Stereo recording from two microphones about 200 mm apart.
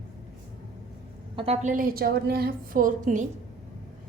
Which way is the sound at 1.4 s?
35° right (ahead or behind).